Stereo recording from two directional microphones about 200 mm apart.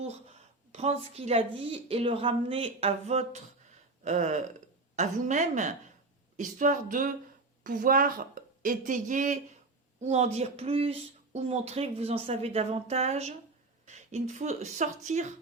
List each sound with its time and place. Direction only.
0.7 s speech: 30° right (ahead or behind)